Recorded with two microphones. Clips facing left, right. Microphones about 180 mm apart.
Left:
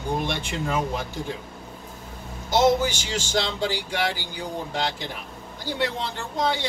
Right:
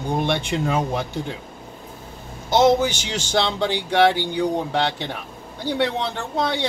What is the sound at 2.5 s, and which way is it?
Speech, 60° right (ahead or behind).